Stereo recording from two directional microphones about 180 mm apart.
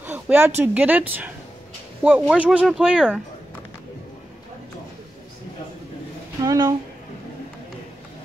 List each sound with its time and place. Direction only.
0.0 s a sound: 10° right (ahead or behind)
0.6 s speech: 10° right (ahead or behind)
6.4 s speech: 20° right (ahead or behind)